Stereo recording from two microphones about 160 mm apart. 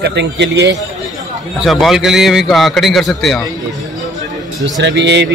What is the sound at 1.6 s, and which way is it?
A man's voice, centre (ahead or behind).